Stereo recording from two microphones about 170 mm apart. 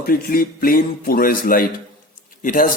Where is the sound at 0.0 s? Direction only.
60° left (ahead or behind).